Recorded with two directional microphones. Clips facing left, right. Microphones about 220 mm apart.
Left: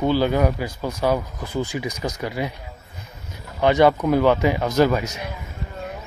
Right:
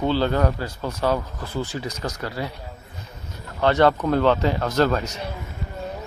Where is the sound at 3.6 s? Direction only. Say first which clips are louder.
Left 2 dB; 15° left (ahead or behind).